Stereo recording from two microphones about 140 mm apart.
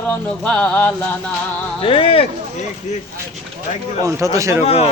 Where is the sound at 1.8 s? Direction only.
40° left (ahead or behind).